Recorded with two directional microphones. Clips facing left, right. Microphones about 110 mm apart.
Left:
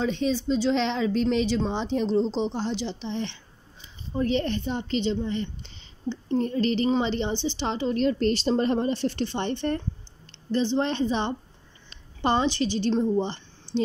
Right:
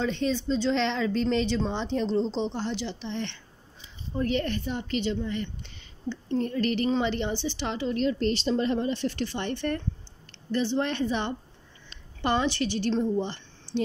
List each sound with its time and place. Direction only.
0.0 s a woman's voice: 15° left (ahead or behind)
7.9 s a woman's voice: 45° left (ahead or behind); by 13.7 s 20° left (ahead or behind)